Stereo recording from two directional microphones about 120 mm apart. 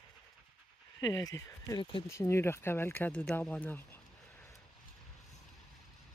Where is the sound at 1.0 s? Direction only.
30° left (ahead or behind); by 4.0 s 15° left (ahead or behind).